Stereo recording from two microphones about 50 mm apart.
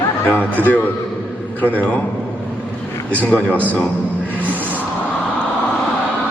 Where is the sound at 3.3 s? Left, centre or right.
Left.